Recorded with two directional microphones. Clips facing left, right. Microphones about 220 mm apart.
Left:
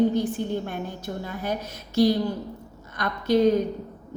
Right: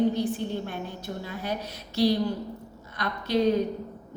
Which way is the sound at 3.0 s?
50° left (ahead or behind).